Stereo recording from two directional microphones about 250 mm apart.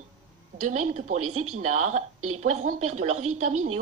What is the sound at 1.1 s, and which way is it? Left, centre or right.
Speech, right.